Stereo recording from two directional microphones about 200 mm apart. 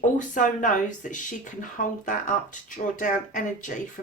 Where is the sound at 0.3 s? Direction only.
40° left (ahead or behind).